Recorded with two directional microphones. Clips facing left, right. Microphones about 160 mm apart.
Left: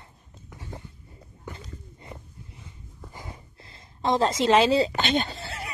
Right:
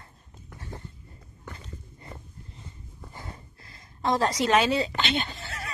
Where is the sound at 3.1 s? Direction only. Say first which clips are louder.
Even; 15° left (ahead or behind).